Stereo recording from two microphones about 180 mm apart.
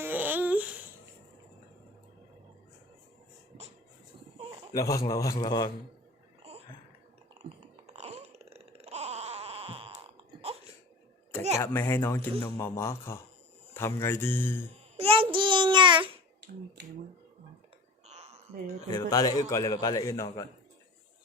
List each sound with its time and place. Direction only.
0.0 s babbling: 10° right (ahead or behind)
4.4 s a sound: 30° right (ahead or behind)
4.7 s a man's voice: 20° left (ahead or behind)
7.9 s groan: 35° right (ahead or behind)
10.5 s a sound: 35° right (ahead or behind)
11.6 s speech: 10° left (ahead or behind)
14.9 s child singing: 30° right (ahead or behind)
16.8 s speech: 70° right (ahead or behind)
18.1 s a sound: 35° right (ahead or behind)
18.9 s a man's voice: 20° left (ahead or behind)